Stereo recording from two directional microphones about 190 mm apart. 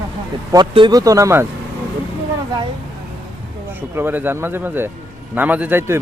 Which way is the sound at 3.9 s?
10° right (ahead or behind).